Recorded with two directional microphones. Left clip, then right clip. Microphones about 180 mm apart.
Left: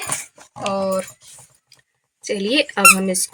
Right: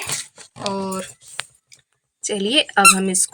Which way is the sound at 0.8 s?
15° right (ahead or behind).